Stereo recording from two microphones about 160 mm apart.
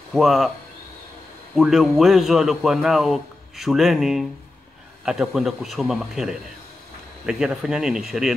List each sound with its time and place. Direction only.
0.1 s a man's voice: centre (ahead or behind)
1.5 s a man's voice: centre (ahead or behind)